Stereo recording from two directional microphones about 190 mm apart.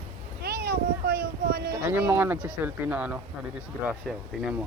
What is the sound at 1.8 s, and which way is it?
Speech, 10° right (ahead or behind).